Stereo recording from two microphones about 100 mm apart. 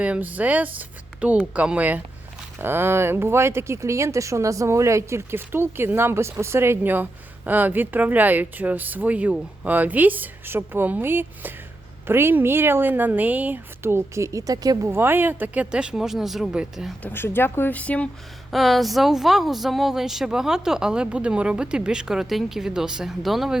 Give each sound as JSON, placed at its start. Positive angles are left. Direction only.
{"t": 0.0, "sound": "speech", "side_deg": -15}
{"t": 14.8, "sound": "speech", "side_deg": -20}
{"t": 17.0, "sound": "speech", "side_deg": 20}
{"t": 18.5, "sound": "speech", "side_deg": 0}